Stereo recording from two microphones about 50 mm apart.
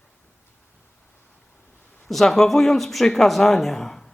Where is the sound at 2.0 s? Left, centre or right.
Centre.